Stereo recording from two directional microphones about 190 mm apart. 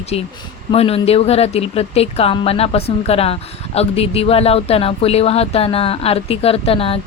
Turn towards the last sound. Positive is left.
turn(degrees=30)  # may be behind; listen again after turning